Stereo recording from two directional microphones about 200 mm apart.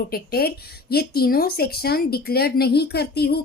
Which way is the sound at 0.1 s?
50° left (ahead or behind).